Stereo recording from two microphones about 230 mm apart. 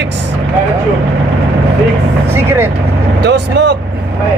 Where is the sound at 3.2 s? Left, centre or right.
Right.